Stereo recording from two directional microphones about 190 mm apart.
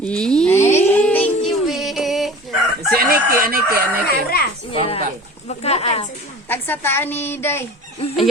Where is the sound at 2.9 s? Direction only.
50° right (ahead or behind).